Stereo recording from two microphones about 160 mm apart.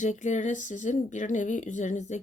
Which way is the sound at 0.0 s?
50° left (ahead or behind).